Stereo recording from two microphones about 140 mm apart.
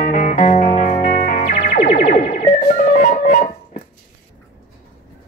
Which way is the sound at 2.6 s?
70° left (ahead or behind).